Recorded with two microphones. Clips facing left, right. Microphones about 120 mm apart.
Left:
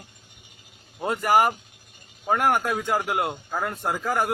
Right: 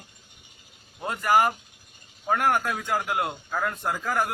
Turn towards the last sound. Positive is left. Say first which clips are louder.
# left 2 dB
turn(degrees=25)  # may be behind; listen again after turning